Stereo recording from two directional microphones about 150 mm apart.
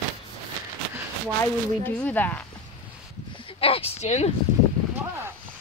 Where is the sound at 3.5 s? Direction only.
40° left (ahead or behind).